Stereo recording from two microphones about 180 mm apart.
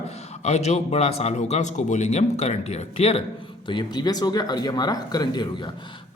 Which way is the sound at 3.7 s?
25° left (ahead or behind).